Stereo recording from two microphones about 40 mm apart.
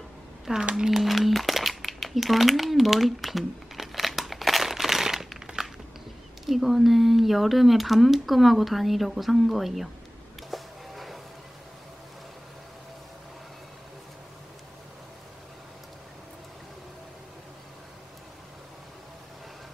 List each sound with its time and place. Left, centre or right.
0.5 s speech: centre
0.9 s crumpling: centre
6.4 s speech: centre
10.5 s a sound: centre